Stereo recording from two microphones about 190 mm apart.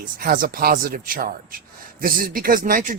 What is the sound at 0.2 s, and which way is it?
Speech, 50° right (ahead or behind).